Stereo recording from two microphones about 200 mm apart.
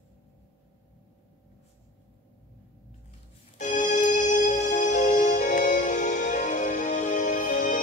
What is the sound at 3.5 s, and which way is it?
Music, 40° left (ahead or behind).